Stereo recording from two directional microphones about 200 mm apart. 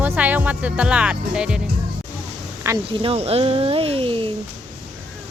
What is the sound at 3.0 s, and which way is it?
Speech, 30° right (ahead or behind).